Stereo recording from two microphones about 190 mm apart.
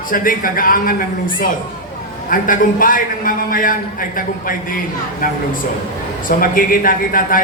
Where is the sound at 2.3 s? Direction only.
45° left (ahead or behind).